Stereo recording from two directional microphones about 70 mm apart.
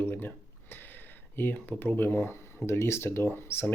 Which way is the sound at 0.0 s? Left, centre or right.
Left.